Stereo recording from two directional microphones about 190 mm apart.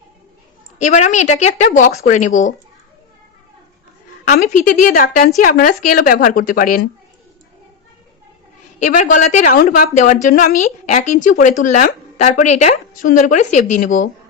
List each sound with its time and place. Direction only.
0.8 s speech: 40° left (ahead or behind)
4.3 s a woman's voice: 40° left (ahead or behind)
8.8 s a woman's voice: 40° left (ahead or behind)